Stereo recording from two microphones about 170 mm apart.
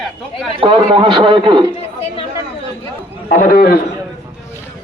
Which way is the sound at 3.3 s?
55° left (ahead or behind).